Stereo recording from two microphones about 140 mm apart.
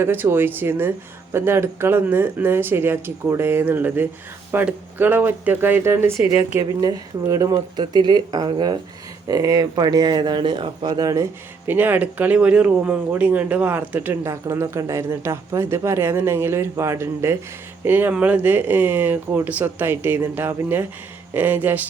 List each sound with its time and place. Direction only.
0.0 s speech: 15° right (ahead or behind)